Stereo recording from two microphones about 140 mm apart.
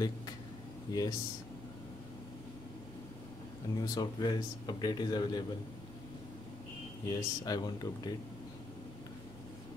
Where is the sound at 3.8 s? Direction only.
30° left (ahead or behind).